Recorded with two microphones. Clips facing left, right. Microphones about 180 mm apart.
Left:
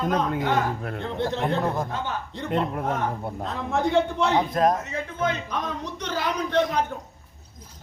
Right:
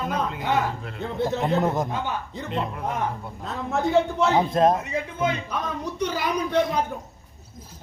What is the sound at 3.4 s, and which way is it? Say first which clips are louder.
Speech: even; centre (ahead or behind).